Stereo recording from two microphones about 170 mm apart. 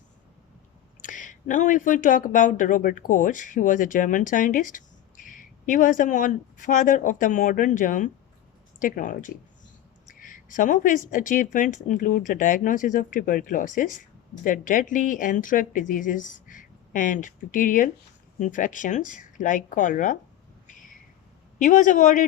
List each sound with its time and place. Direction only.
1.0 s speech: 50° left (ahead or behind)
21.6 s speech: 50° left (ahead or behind)